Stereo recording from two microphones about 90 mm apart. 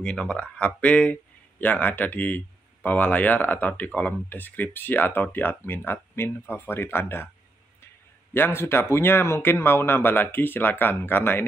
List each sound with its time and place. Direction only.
0.0 s speech: 10° left (ahead or behind)
8.3 s speech: 25° left (ahead or behind)